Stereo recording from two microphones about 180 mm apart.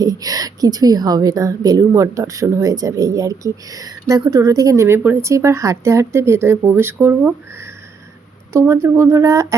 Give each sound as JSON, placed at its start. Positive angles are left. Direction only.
{"t": 0.0, "sound": "a woman's voice", "side_deg": -20}